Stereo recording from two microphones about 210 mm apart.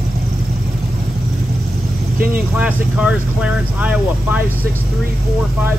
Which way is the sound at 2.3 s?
5° right (ahead or behind).